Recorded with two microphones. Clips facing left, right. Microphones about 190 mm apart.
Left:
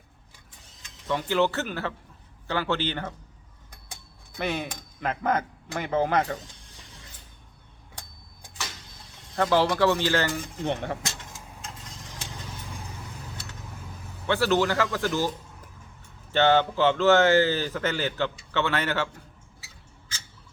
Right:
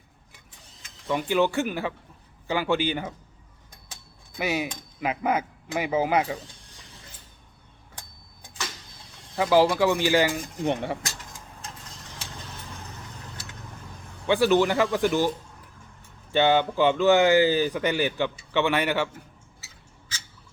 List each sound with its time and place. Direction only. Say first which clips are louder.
1.0 s speech: right 1 dB; 15° right (ahead or behind)
4.4 s speech: right 2 dB; 10° right (ahead or behind)
9.3 s speech: right 3 dB; 10° right (ahead or behind)
12.7 s vehicle: left 1 dB; 10° left (ahead or behind)
14.3 s speech: right 3 dB; 15° right (ahead or behind)
16.3 s speech: even; 15° right (ahead or behind)